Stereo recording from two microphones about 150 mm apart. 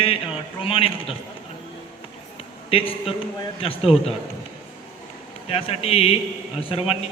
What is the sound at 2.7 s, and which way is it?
Speech, 35° left (ahead or behind).